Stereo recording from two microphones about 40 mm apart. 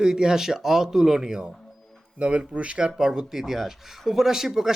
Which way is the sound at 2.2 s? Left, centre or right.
Right.